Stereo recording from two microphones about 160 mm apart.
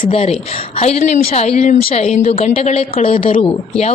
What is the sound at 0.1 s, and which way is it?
A woman's voice, 40° left (ahead or behind).